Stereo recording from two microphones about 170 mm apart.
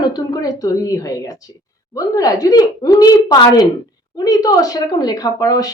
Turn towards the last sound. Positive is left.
turn(degrees=20)  # may be behind; listen again after turning